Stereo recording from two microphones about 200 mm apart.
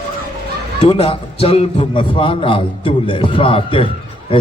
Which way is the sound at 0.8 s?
25° left (ahead or behind).